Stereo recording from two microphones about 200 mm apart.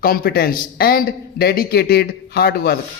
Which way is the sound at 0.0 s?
45° left (ahead or behind).